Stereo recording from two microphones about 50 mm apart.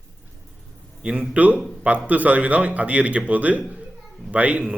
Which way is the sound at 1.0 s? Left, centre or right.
Right.